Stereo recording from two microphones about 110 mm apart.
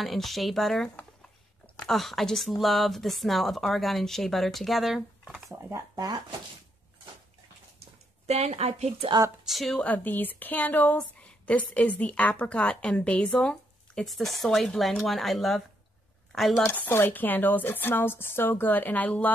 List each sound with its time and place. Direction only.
0.0 s speech: centre (ahead or behind)
5.7 s speech: 35° right (ahead or behind)
8.3 s speech: 75° right (ahead or behind)
9.5 s speech: centre (ahead or behind)
9.8 s a woman's voice: 15° left (ahead or behind)
16.6 s a woman's voice: 20° left (ahead or behind)